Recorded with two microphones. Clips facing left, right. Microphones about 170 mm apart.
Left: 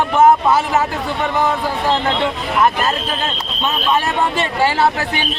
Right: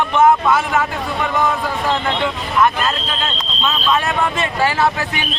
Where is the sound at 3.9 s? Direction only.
30° left (ahead or behind).